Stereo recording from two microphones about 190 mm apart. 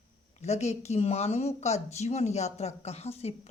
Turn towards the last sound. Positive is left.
turn(degrees=35)  # may be behind; listen again after turning